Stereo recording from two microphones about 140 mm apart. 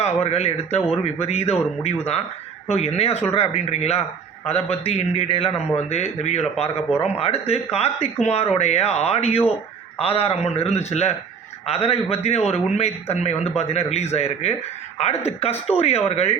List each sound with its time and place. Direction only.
0.0 s a man's voice: 50° left (ahead or behind)